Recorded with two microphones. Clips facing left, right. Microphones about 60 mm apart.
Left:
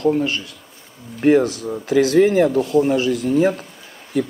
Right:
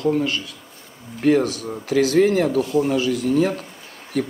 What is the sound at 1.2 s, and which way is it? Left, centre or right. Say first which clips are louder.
Speech: left 3 dB; left.